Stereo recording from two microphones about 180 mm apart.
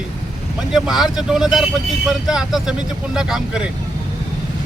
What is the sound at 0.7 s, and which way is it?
Speech, centre (ahead or behind).